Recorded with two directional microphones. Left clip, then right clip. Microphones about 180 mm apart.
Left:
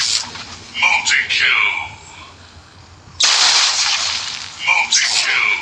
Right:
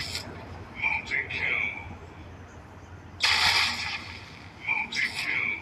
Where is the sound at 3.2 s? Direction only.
50° left (ahead or behind).